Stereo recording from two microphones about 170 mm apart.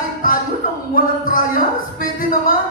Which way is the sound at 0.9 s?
55° left (ahead or behind).